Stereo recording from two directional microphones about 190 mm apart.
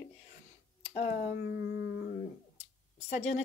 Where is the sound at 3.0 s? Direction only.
35° left (ahead or behind).